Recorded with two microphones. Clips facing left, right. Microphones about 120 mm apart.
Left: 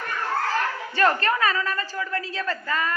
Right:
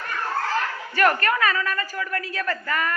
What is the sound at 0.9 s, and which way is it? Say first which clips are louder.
A man's voice: right 1 dB; 25° left (ahead or behind).